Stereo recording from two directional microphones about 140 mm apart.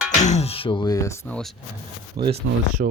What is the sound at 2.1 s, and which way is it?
Speech, 35° right (ahead or behind).